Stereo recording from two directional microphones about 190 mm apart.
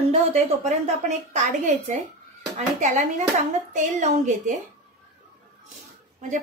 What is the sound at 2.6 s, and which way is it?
A woman's voice, 40° right (ahead or behind).